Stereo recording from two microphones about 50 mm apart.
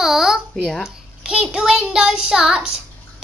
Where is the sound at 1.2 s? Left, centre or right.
Centre.